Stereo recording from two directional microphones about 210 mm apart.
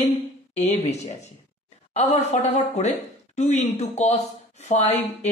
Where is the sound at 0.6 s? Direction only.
30° left (ahead or behind).